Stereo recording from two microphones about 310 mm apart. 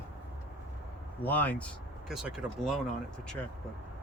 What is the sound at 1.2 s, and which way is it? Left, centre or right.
Speech, centre.